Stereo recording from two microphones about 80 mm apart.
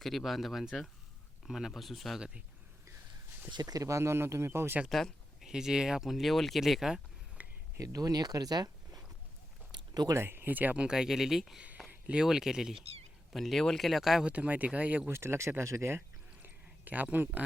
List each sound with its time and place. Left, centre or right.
0.0 s speech: centre
3.5 s speech: right
4.9 s a sound: centre
5.5 s speech: centre
7.4 s a sound: centre
7.8 s speech: right
9.7 s a sound: right
10.2 s speech: right
10.8 s speech: centre
14.3 s speech: centre
15.1 s speech: right
16.0 s a sound: right